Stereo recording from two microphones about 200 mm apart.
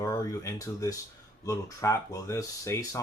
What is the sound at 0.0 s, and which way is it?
Speech, 15° left (ahead or behind).